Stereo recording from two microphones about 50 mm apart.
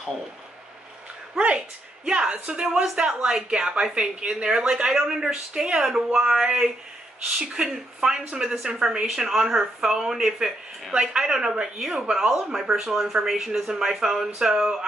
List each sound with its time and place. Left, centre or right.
2.0 s a woman's voice: centre